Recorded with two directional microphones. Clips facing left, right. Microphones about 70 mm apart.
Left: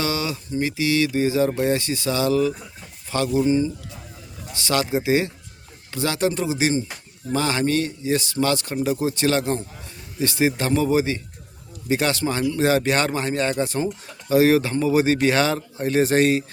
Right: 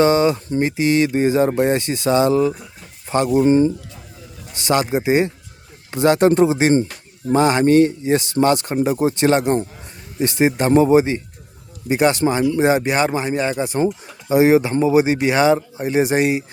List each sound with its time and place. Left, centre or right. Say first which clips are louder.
0.0 s speech: right 11 dB; right
3.3 s speech: right 6 dB; right
4.5 s speech: right 4 dB; right
6.2 s speech: right 5 dB; right
7.3 s a man's voice: right 8 dB; right